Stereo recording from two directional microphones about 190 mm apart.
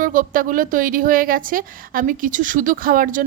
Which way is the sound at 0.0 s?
45° right (ahead or behind).